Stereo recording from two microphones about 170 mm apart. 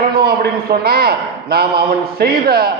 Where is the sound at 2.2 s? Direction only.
65° right (ahead or behind).